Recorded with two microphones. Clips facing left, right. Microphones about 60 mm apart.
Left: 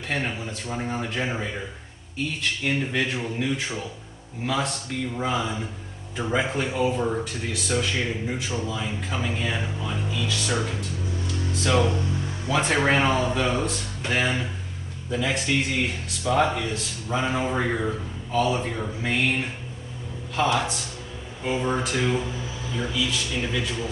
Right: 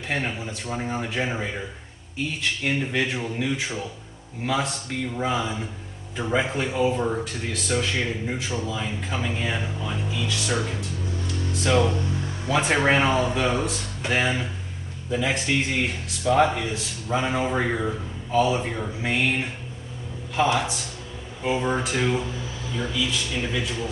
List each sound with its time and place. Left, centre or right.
0.1 s speech: centre
2.6 s a man's voice: centre